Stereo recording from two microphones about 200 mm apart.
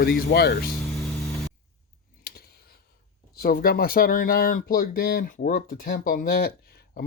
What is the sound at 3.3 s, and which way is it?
Speech, 50° left (ahead or behind).